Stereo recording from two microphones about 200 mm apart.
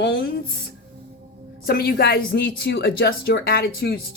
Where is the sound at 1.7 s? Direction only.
50° left (ahead or behind).